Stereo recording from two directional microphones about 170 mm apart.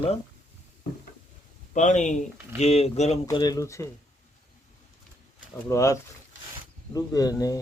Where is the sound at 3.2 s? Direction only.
20° left (ahead or behind).